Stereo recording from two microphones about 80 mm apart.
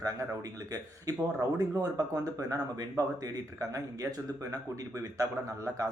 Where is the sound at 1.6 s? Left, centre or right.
Right.